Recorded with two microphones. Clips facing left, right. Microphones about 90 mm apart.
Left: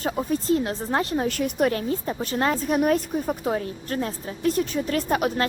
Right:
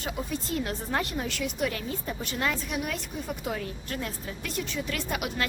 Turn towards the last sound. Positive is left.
turn(degrees=40)  # may be behind; listen again after turning